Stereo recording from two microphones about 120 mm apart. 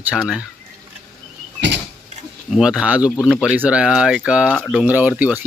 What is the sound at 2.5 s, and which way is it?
Speech, 5° right (ahead or behind).